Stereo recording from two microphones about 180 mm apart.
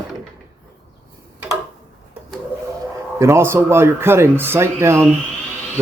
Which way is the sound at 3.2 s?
15° right (ahead or behind).